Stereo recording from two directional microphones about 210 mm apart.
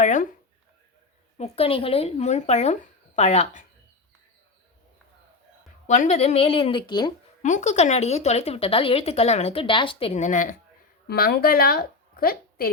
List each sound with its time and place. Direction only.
0.0 s speech: 35° left (ahead or behind)
1.4 s a woman's voice: 25° left (ahead or behind)
5.9 s a woman's voice: 30° left (ahead or behind)
7.4 s a woman's voice: 35° left (ahead or behind)
11.1 s a woman's voice: 45° left (ahead or behind)